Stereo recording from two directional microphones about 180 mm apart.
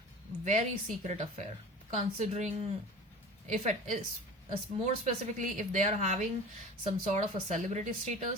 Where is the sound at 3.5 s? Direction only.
40° right (ahead or behind).